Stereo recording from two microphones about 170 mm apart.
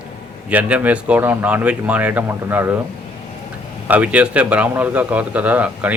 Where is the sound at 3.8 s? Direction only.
10° right (ahead or behind).